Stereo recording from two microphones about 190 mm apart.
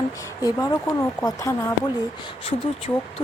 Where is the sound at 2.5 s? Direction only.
30° left (ahead or behind).